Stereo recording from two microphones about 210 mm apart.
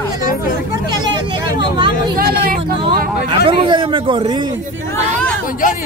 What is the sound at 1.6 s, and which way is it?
Vehicle, 20° right (ahead or behind).